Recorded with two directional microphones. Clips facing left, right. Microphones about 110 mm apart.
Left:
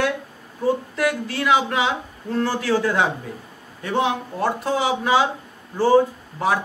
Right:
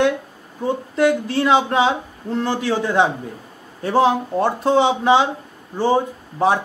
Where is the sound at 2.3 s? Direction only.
20° right (ahead or behind).